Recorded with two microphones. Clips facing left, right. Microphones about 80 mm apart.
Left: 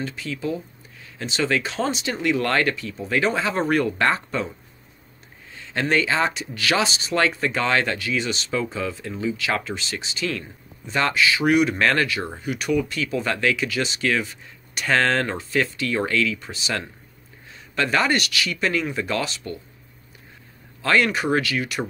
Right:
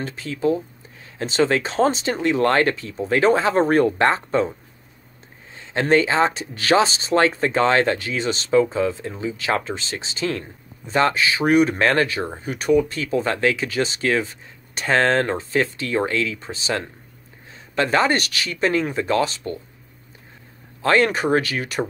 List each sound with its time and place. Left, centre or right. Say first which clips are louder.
0.0 s speech: right 5 dB; right
5.6 s speech: right 4 dB; right
20.8 s speech: right 3 dB; right